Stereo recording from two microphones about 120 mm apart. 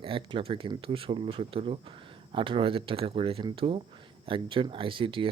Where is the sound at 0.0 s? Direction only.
45° right (ahead or behind).